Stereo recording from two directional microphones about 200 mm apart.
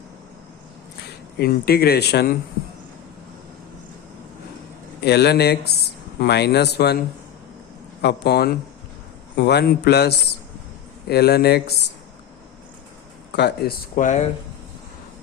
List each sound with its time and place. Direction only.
1.4 s speech: 50° left (ahead or behind)
5.0 s speech: 55° left (ahead or behind)
8.0 s speech: 55° left (ahead or behind)
13.3 s speech: 55° left (ahead or behind)
13.9 s speech: 35° left (ahead or behind)